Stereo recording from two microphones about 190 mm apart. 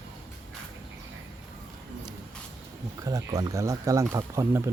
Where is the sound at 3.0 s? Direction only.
20° right (ahead or behind).